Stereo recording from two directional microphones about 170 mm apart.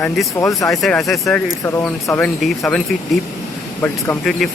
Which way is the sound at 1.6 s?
15° left (ahead or behind).